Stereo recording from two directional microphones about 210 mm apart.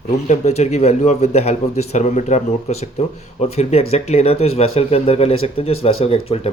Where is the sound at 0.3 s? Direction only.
30° left (ahead or behind).